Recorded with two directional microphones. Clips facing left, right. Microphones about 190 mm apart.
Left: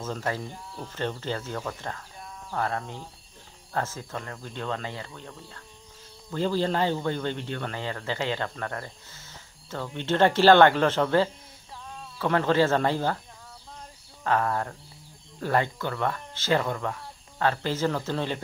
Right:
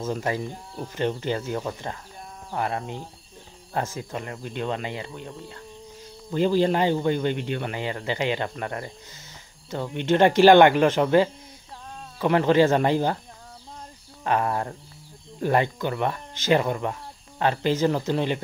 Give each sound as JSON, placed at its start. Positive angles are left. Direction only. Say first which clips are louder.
{"t": 0.0, "sound": "speech", "louder": "right 4 dB", "side_deg": -15}
{"t": 2.8, "sound": "speech", "louder": "right 5 dB", "side_deg": -25}
{"t": 3.7, "sound": "speech", "louder": "right 2 dB", "side_deg": -15}
{"t": 14.2, "sound": "speech", "louder": "right 2 dB", "side_deg": -15}